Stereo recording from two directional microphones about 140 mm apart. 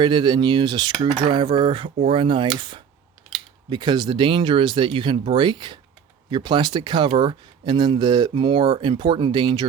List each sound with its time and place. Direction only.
0.0 s speech: 30° right (ahead or behind)